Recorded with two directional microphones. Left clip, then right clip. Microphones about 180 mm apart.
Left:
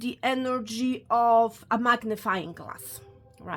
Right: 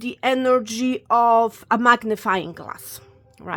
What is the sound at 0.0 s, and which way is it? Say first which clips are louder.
A woman's voice: right 7 dB; 25° right (ahead or behind).